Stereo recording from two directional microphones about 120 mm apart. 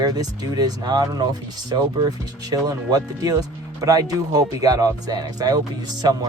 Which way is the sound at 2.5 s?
30° right (ahead or behind).